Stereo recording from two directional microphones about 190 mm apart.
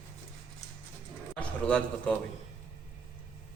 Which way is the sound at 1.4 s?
5° left (ahead or behind).